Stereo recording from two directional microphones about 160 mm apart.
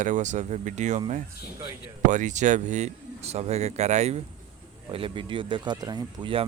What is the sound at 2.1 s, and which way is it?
Speech, 50° right (ahead or behind).